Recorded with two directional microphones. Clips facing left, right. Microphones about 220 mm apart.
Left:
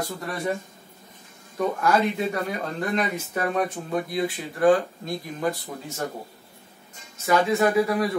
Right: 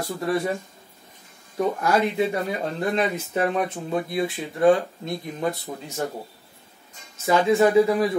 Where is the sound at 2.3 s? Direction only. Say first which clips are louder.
Right 2 dB; 25° right (ahead or behind).